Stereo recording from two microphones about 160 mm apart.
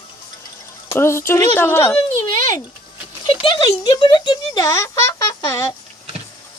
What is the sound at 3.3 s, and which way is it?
Speech, 30° left (ahead or behind).